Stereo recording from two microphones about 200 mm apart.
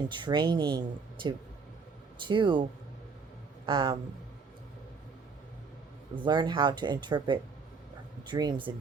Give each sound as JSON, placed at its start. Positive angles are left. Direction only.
{"t": 0.1, "sound": "speech", "side_deg": -25}
{"t": 2.1, "sound": "speech", "side_deg": -25}
{"t": 3.7, "sound": "speech", "side_deg": -20}
{"t": 6.1, "sound": "speech", "side_deg": -20}